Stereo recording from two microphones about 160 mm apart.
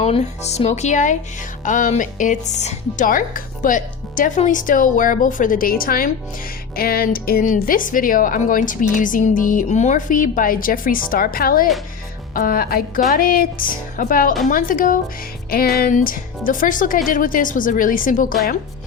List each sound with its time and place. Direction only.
0.0 s speech: 40° left (ahead or behind); by 14.9 s 55° left (ahead or behind)
15.4 s music: 70° left (ahead or behind)
15.8 s speech: 55° left (ahead or behind)